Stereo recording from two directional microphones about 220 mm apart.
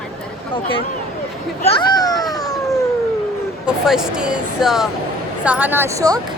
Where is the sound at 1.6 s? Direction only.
25° left (ahead or behind).